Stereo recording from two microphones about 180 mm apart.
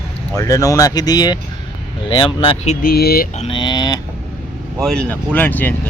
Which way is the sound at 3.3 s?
35° left (ahead or behind).